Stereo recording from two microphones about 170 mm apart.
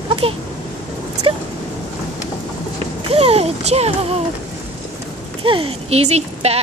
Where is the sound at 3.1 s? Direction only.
35° right (ahead or behind).